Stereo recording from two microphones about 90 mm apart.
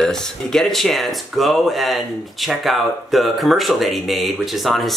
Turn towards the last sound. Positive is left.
turn(degrees=0)  # may be behind; listen again after turning